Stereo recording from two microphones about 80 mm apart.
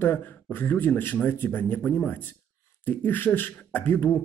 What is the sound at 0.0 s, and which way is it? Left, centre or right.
Speech, left.